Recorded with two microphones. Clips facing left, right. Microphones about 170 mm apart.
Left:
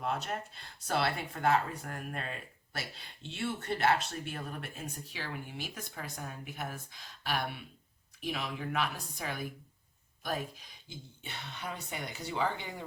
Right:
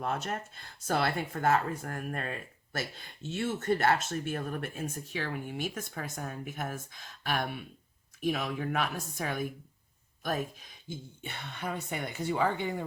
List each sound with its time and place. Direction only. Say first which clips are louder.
0.0 s speech: right 2 dB; 45° right (ahead or behind)
10.8 s speech: right 6 dB; 50° right (ahead or behind)